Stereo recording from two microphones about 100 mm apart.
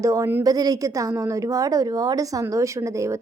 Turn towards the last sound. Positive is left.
turn(degrees=-30)  # may be behind; listen again after turning